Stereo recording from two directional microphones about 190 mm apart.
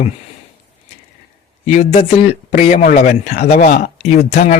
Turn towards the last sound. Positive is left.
turn(degrees=35)  # may be behind; listen again after turning